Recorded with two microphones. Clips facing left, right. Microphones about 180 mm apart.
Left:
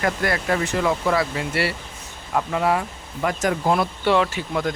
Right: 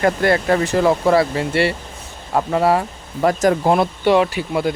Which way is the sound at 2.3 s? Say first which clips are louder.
Right 5 dB; 35° right (ahead or behind).